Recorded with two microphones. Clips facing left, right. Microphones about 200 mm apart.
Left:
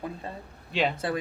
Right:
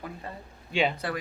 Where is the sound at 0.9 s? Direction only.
25° left (ahead or behind).